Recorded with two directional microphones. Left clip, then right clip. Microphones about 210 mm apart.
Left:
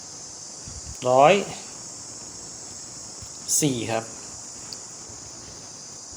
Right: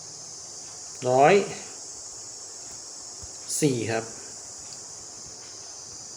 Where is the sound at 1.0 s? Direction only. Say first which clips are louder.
Left 2 dB; 20° left (ahead or behind).